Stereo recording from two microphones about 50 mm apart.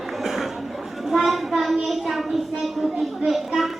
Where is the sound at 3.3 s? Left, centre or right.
Centre.